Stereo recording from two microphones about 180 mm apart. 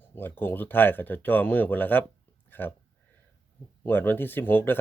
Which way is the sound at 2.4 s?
10° left (ahead or behind).